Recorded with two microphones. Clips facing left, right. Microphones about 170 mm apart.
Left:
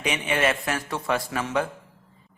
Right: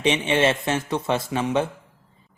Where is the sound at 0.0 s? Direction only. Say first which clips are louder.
Right 4 dB; 25° right (ahead or behind).